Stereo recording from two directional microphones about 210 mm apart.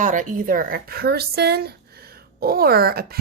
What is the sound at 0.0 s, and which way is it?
A woman's voice, 35° right (ahead or behind).